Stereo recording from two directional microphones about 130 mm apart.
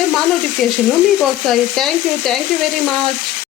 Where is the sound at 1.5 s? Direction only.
5° left (ahead or behind).